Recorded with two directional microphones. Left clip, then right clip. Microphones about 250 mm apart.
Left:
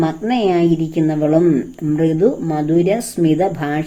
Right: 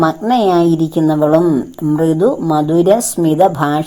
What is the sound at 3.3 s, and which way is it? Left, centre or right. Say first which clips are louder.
Speech: right 8 dB; centre.